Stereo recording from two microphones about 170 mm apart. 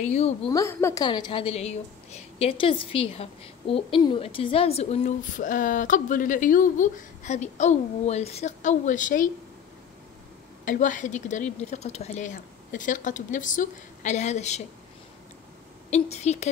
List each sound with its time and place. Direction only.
0.0 s a woman's voice: 40° left (ahead or behind)
0.5 s a woman's voice: 15° left (ahead or behind)
1.0 s a woman's voice: 25° left (ahead or behind); by 9.3 s 50° left (ahead or behind)
10.6 s a woman's voice: 50° left (ahead or behind)
15.9 s a woman's voice: 40° left (ahead or behind)